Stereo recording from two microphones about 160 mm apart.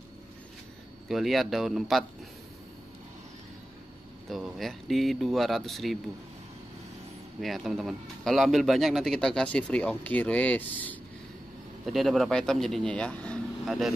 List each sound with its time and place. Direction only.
1.0 s a man's voice: centre (ahead or behind)
4.3 s a man's voice: centre (ahead or behind)
7.3 s a man's voice: centre (ahead or behind)
11.8 s speech: centre (ahead or behind)